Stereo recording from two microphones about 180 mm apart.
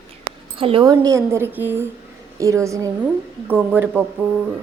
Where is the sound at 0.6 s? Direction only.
30° right (ahead or behind); by 4.0 s 10° right (ahead or behind).